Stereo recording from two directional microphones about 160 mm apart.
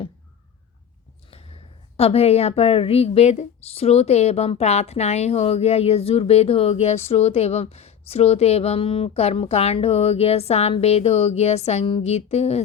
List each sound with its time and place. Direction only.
1.3 s a woman's voice: 35° left (ahead or behind)